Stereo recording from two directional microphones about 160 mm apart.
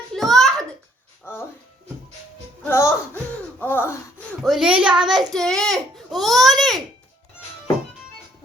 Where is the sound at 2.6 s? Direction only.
20° left (ahead or behind).